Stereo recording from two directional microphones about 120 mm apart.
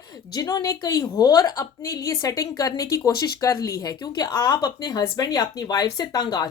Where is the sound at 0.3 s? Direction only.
35° left (ahead or behind).